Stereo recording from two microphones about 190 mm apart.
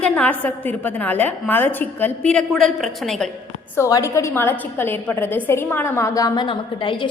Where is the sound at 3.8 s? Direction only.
15° left (ahead or behind).